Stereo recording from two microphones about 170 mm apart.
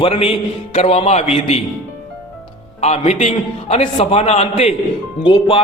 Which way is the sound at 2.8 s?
40° left (ahead or behind).